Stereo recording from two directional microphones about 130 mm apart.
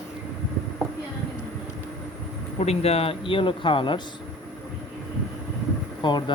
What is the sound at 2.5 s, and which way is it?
Speech, 50° left (ahead or behind).